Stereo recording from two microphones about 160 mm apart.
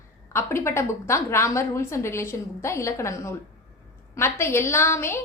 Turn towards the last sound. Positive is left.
turn(degrees=15)  # may be behind; listen again after turning